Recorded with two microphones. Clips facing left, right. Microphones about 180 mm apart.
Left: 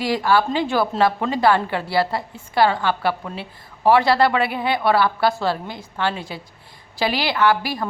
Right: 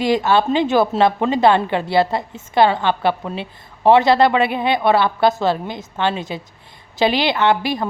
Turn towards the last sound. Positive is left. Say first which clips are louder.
# right 2 dB
turn(degrees=-20)  # may be behind; listen again after turning